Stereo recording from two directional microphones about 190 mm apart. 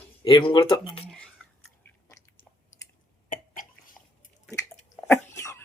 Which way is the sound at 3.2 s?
45° left (ahead or behind).